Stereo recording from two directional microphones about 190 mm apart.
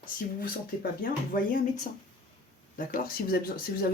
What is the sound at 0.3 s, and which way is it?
Speech, 50° left (ahead or behind).